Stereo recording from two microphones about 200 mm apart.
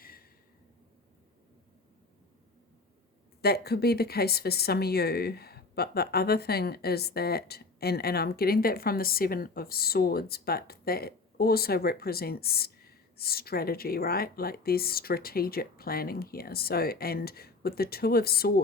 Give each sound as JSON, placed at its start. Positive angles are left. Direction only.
{"t": 3.4, "sound": "speech", "side_deg": 55}